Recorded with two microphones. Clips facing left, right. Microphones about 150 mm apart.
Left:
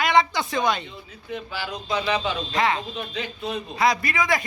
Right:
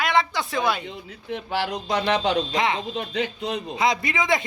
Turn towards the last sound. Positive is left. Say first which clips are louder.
# right 1 dB
turn(degrees=-20)  # may be behind; listen again after turning